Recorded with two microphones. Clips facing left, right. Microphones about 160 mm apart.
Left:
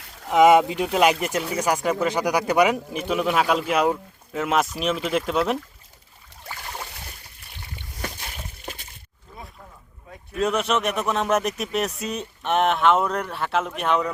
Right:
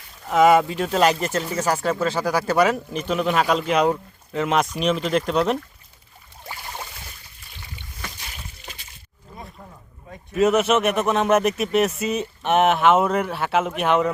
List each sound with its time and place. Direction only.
0.3 s speech: 20° left (ahead or behind); by 5.5 s 5° left (ahead or behind)
7.5 s boat: 50° left (ahead or behind)
8.6 s a sound: 50° left (ahead or behind)
10.1 s speech: 5° right (ahead or behind)